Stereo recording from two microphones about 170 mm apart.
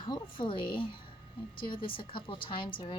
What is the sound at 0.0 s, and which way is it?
A woman's voice, 30° left (ahead or behind).